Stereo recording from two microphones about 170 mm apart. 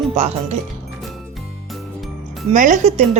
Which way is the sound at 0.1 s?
40° right (ahead or behind).